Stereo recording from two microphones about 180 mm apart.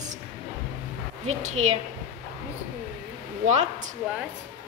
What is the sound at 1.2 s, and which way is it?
Speech, 40° right (ahead or behind).